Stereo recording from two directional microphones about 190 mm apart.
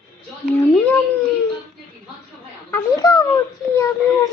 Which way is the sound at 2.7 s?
20° left (ahead or behind).